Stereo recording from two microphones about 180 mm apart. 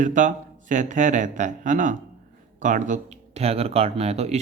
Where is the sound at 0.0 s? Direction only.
45° right (ahead or behind).